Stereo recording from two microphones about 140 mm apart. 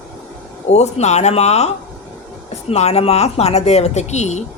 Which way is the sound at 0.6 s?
50° left (ahead or behind).